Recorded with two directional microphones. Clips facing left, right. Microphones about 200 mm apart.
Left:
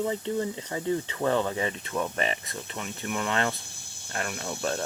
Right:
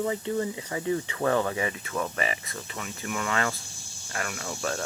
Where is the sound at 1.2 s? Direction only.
20° left (ahead or behind).